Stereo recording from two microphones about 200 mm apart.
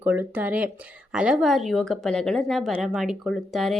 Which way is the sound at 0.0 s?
10° right (ahead or behind).